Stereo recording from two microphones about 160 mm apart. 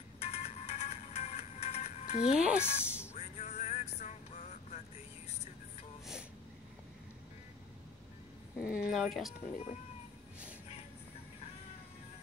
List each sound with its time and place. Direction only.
0.2 s music: 40° left (ahead or behind)
2.4 s speech: 5° right (ahead or behind)
3.2 s music: 45° left (ahead or behind)
8.5 s a sound: 5° right (ahead or behind)
8.9 s speech: centre (ahead or behind)